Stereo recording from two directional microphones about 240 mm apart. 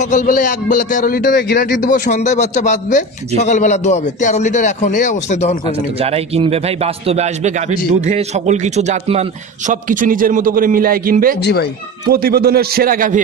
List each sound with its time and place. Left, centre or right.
0.0 s a man's voice: left
5.9 s a man's voice: right